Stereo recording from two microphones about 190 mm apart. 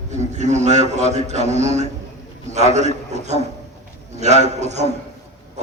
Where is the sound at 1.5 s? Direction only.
40° right (ahead or behind).